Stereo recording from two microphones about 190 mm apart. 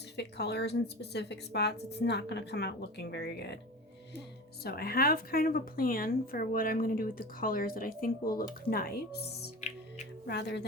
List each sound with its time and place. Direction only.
0.2 s speech: 60° left (ahead or behind)
4.6 s a woman's voice: 55° left (ahead or behind)